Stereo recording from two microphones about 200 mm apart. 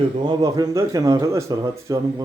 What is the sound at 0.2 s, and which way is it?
Speech, 20° right (ahead or behind).